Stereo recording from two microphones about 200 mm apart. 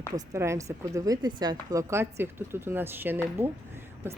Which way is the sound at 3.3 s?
10° right (ahead or behind).